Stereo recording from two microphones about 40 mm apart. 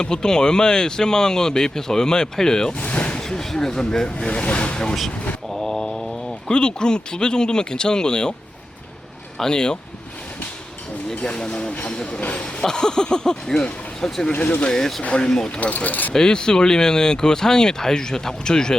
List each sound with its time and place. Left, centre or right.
0.0 s speech: centre
2.7 s a sound: left
3.2 s speech: centre
5.6 s mantra: centre
6.5 s speech: left
9.4 s speech: centre
11.1 s speech: left
14.3 s speech: left
14.7 s speech: centre
15.0 s speech: left
15.6 s speech: left
16.1 s speech: centre